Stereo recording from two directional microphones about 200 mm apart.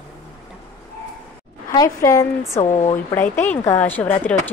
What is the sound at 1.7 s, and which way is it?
Speech, 15° left (ahead or behind).